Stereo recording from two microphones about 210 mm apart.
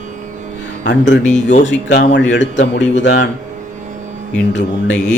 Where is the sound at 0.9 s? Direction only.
60° left (ahead or behind).